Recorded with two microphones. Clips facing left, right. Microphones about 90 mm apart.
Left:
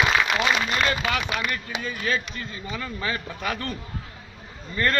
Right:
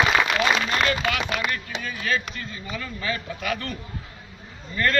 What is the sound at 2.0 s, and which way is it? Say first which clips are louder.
Speech: right 2 dB; 30° left (ahead or behind).